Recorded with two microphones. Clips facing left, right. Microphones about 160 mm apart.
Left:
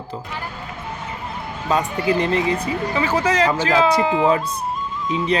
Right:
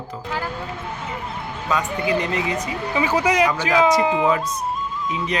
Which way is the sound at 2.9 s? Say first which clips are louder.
Right 1 dB; 10° right (ahead or behind).